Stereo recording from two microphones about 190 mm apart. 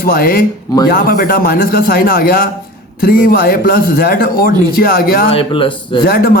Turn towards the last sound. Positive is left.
turn(degrees=50)  # may be behind; listen again after turning